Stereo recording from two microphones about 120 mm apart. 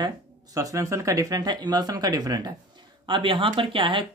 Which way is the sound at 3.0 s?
45° right (ahead or behind).